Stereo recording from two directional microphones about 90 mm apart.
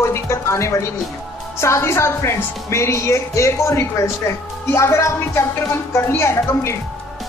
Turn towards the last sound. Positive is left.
turn(degrees=30)  # may be behind; listen again after turning